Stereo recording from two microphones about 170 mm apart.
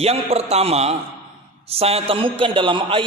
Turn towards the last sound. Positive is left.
turn(degrees=-30)  # may be behind; listen again after turning